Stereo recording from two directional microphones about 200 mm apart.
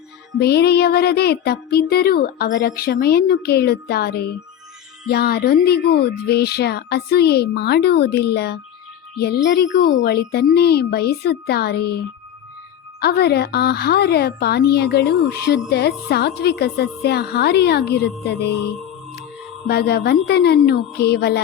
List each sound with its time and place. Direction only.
0.3 s a woman's voice: 55° left (ahead or behind)
19.6 s a woman's voice: 55° left (ahead or behind)